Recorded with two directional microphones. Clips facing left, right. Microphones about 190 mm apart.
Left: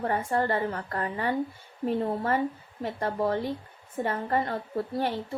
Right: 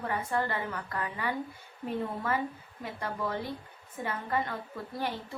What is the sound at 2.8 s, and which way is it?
A woman's voice, 40° left (ahead or behind).